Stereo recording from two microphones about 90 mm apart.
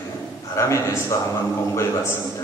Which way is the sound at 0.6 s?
30° left (ahead or behind).